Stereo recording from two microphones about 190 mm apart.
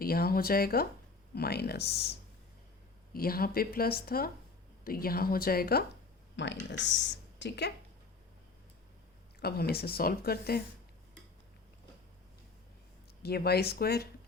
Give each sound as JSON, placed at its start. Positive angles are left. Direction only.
{"t": 0.0, "sound": "a woman's voice", "side_deg": 50}
{"t": 3.1, "sound": "speech", "side_deg": 50}
{"t": 6.3, "sound": "speech", "side_deg": 65}
{"t": 9.4, "sound": "a woman's voice", "side_deg": 55}
{"t": 13.2, "sound": "a woman's voice", "side_deg": 55}